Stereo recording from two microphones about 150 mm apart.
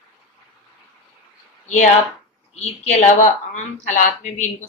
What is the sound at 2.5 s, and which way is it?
A woman's voice, 50° left (ahead or behind).